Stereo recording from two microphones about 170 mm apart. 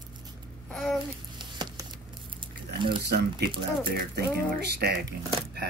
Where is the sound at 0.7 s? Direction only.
5° left (ahead or behind).